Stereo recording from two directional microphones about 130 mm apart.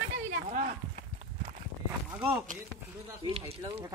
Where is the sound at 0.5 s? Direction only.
70° right (ahead or behind).